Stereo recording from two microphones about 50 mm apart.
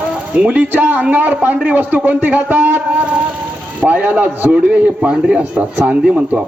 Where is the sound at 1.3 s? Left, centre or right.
Right.